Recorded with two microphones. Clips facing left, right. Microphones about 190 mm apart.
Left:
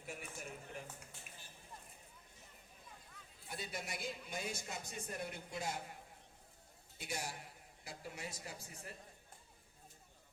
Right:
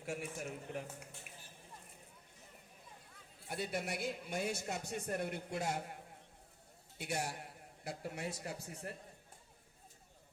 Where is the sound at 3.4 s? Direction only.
60° right (ahead or behind).